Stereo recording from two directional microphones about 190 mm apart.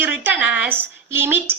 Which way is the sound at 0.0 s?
10° right (ahead or behind).